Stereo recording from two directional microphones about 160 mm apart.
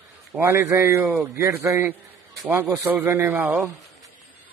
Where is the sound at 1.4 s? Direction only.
15° right (ahead or behind).